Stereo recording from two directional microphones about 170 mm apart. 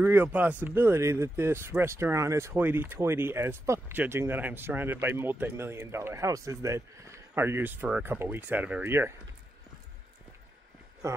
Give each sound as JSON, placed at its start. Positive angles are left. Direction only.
{"t": 0.0, "sound": "speech", "side_deg": -10}
{"t": 11.0, "sound": "speech", "side_deg": -20}